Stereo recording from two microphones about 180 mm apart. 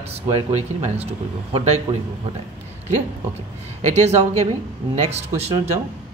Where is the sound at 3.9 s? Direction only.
40° right (ahead or behind).